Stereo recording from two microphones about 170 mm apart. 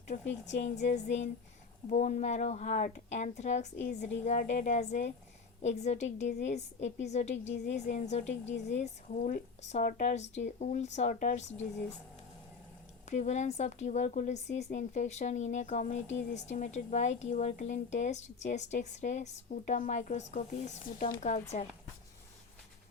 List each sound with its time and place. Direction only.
0.1 s speech: 45° left (ahead or behind)
13.1 s speech: 45° left (ahead or behind)